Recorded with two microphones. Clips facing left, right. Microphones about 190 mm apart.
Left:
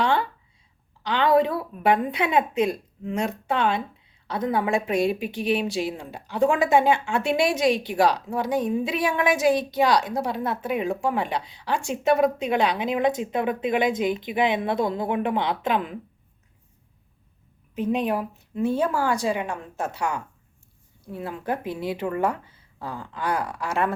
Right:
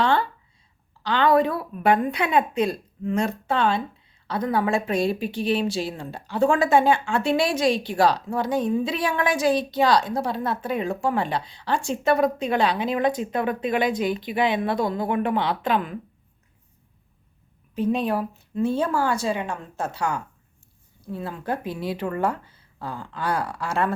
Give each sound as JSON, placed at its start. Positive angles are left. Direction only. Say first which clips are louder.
{"t": 0.0, "sound": "a sound", "louder": "right 1 dB", "side_deg": 15}
{"t": 1.0, "sound": "a woman's voice", "louder": "right 1 dB", "side_deg": 15}
{"t": 17.7, "sound": "a woman's voice", "louder": "right 1 dB", "side_deg": 20}